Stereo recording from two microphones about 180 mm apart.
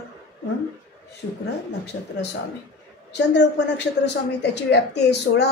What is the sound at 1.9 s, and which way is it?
Speech, 75° left (ahead or behind).